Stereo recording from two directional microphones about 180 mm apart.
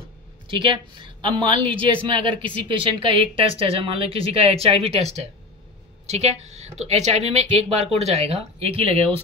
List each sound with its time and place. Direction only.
0.5 s a woman's voice: 25° right (ahead or behind)